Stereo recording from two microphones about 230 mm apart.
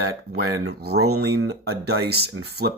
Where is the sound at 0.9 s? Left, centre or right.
Right.